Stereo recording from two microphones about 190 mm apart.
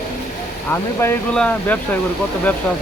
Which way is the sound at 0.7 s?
10° left (ahead or behind).